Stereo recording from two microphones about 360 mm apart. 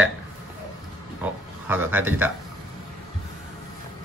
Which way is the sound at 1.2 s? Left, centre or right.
Centre.